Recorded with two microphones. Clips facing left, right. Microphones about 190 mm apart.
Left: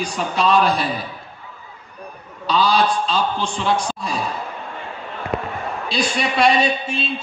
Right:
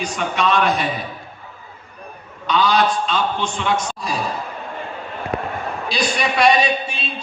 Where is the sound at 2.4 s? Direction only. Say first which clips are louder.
Even; 35° left (ahead or behind).